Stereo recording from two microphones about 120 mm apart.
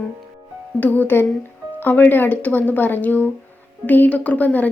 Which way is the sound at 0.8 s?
15° left (ahead or behind).